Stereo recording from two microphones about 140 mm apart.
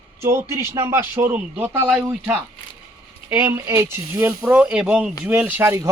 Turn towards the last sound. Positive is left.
turn(degrees=-20)  # may be behind; listen again after turning